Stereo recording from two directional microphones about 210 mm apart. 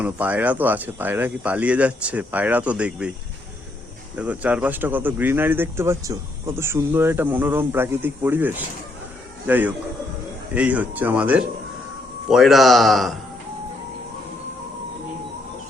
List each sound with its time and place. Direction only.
0.0 s speech: 5° right (ahead or behind)
4.1 s speech: 5° right (ahead or behind)